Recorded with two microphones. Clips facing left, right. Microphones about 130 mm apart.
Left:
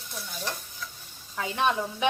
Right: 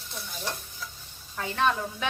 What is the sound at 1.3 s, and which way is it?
Speech, 15° left (ahead or behind).